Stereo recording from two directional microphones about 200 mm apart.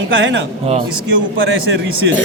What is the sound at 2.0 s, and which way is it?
Speech, 65° right (ahead or behind).